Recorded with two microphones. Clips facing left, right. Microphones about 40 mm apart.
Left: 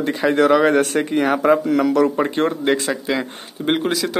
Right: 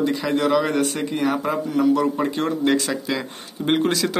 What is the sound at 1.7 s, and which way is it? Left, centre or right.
Speech, left.